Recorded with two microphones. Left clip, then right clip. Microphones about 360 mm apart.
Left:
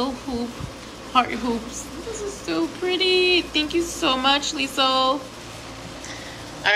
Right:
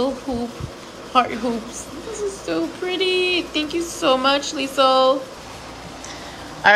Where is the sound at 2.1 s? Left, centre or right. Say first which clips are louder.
Right 3 dB; centre.